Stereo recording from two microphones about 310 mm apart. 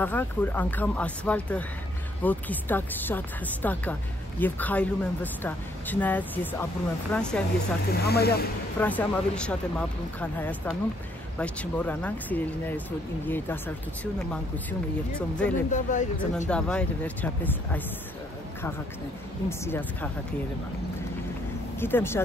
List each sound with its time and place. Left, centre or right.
0.0 s speech: centre
7.9 s speech: left
8.7 s speech: centre
15.7 s speech: left
16.4 s speech: centre
19.6 s speech: centre
21.7 s speech: centre